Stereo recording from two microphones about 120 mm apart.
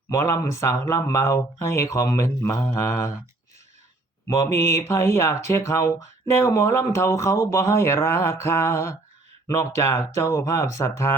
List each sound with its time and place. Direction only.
0.1 s speech: 25° left (ahead or behind)
4.4 s speech: 25° left (ahead or behind)